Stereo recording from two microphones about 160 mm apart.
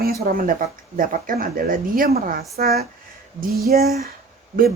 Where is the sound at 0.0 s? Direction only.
65° right (ahead or behind).